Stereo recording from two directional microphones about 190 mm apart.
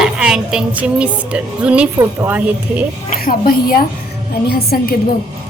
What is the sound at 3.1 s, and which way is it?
A woman's voice, 50° left (ahead or behind).